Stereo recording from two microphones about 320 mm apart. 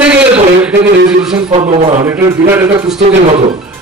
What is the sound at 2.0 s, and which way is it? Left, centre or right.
A man's voice, centre.